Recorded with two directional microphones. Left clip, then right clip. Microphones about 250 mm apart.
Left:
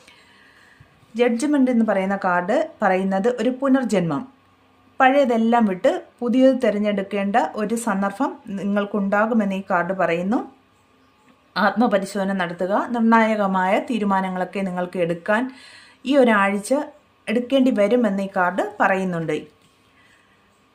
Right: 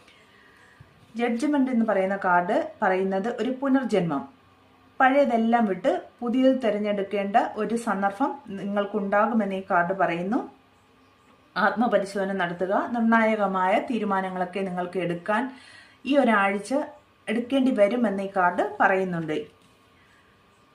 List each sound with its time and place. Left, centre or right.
1.1 s a woman's voice: left
11.5 s a woman's voice: left